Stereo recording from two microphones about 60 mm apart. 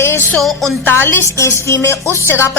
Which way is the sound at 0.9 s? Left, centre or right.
Left.